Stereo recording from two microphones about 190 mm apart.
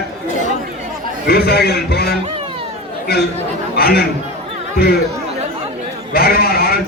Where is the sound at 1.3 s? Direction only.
55° left (ahead or behind).